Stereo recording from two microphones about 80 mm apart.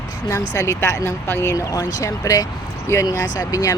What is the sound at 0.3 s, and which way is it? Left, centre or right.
Speech, left.